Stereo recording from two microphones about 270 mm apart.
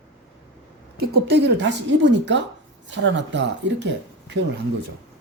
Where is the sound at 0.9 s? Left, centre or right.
Right.